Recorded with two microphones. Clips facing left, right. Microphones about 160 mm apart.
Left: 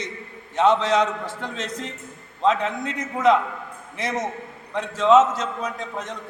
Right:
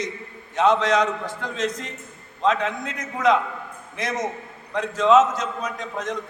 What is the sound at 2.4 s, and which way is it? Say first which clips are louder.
Speech: left 1 dB; 5° left (ahead or behind).